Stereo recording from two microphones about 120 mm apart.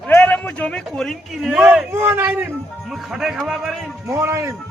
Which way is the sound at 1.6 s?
15° right (ahead or behind).